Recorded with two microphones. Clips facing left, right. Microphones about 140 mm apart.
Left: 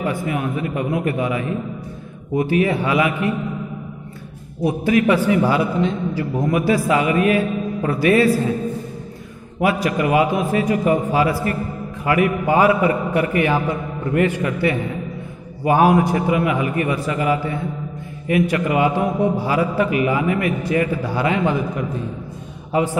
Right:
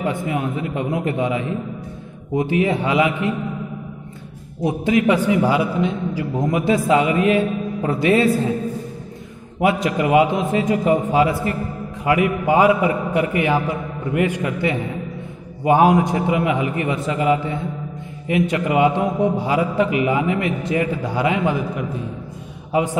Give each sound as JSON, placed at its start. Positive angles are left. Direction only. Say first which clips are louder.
{"t": 0.0, "sound": "a man's voice", "louder": "even", "side_deg": -25}
{"t": 4.6, "sound": "a man's voice", "louder": "left 1 dB", "side_deg": -20}
{"t": 9.6, "sound": "a man's voice", "louder": "even", "side_deg": -25}